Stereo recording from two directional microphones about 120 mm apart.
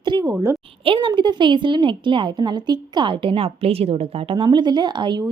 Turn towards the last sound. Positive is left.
turn(degrees=-40)  # may be behind; listen again after turning